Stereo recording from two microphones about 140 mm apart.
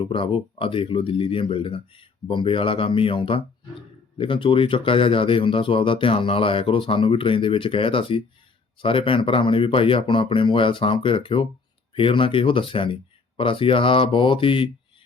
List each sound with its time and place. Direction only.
0.0 s speech: 40° left (ahead or behind)